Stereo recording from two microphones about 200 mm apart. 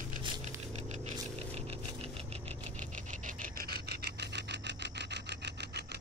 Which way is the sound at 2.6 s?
40° right (ahead or behind).